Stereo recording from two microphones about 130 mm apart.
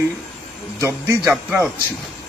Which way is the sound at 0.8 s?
20° right (ahead or behind).